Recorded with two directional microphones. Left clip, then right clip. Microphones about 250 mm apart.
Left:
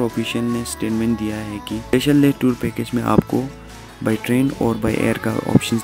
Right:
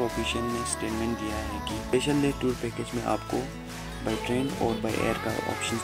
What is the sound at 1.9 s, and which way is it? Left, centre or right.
Speech, left.